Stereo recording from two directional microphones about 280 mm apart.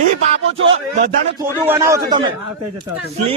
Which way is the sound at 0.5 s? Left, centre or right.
Right.